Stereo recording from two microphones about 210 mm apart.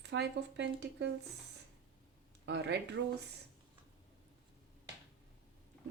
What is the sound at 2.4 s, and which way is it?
Speech, 60° right (ahead or behind).